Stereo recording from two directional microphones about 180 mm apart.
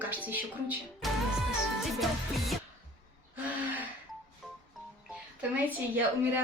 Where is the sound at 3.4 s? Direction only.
10° right (ahead or behind).